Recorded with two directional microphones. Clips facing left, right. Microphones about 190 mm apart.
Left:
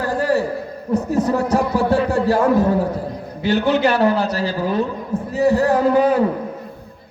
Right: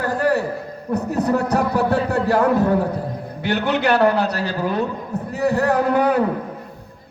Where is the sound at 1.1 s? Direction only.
65° right (ahead or behind).